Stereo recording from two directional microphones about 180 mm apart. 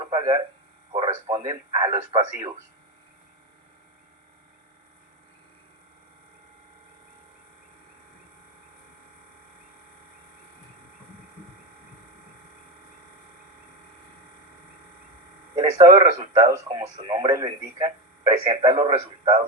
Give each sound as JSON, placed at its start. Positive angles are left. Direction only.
{"t": 0.0, "sound": "speech", "side_deg": -20}
{"t": 15.5, "sound": "speech", "side_deg": -20}